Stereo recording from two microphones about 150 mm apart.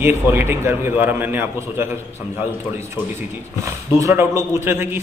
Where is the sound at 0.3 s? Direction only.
15° right (ahead or behind).